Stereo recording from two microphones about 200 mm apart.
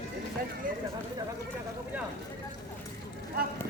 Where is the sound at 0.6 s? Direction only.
45° right (ahead or behind).